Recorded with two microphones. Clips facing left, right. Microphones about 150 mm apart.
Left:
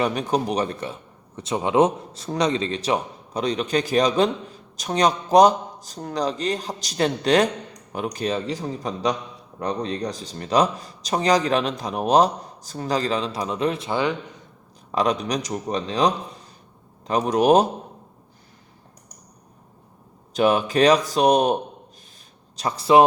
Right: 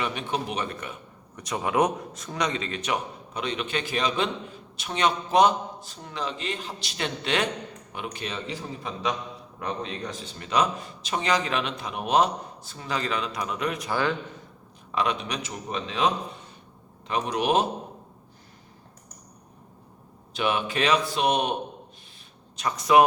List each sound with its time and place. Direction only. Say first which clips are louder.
0.0 s speech: left 7 dB; 40° left (ahead or behind); by 14.2 s 20° left (ahead or behind)
14.9 s speech: left 5 dB; 40° left (ahead or behind)
20.3 s speech: left 7 dB; 40° left (ahead or behind)